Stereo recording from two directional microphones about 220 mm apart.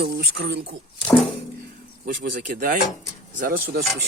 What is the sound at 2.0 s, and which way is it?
Speech, 40° right (ahead or behind).